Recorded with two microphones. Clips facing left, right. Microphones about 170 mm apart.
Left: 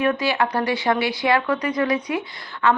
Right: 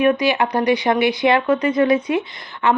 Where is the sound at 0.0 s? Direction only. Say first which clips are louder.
Right 4 dB; 15° right (ahead or behind).